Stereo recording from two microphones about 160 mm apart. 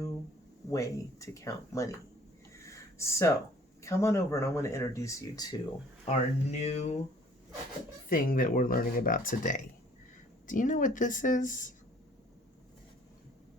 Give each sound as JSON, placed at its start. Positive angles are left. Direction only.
{"t": 0.7, "sound": "speech", "side_deg": 20}
{"t": 2.6, "sound": "a sound", "side_deg": 20}
{"t": 3.8, "sound": "speech", "side_deg": 15}
{"t": 6.1, "sound": "speech", "side_deg": 45}
{"t": 8.1, "sound": "speech", "side_deg": 60}